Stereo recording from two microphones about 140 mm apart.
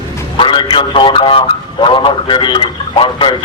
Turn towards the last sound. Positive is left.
turn(degrees=35)  # may be behind; listen again after turning